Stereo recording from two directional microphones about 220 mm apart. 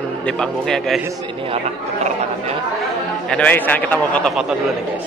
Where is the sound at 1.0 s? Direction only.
25° right (ahead or behind).